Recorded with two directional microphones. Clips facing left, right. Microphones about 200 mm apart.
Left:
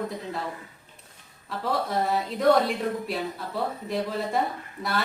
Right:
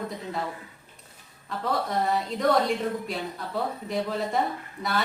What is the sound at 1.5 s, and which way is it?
A woman's voice, centre (ahead or behind).